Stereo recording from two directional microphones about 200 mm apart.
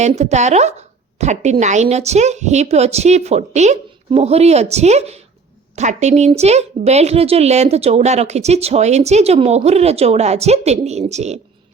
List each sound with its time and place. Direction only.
0.0 s a woman's voice: 35° right (ahead or behind)